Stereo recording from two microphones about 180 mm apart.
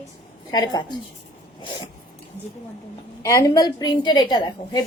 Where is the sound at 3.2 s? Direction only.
15° left (ahead or behind).